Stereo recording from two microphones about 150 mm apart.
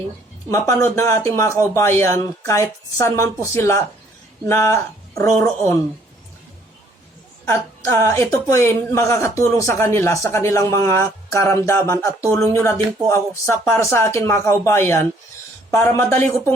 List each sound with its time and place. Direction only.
0.5 s a woman's voice: 20° left (ahead or behind)
7.4 s a woman's voice: 20° left (ahead or behind)